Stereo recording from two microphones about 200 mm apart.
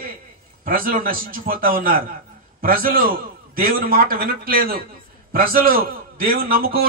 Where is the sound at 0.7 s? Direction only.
45° right (ahead or behind).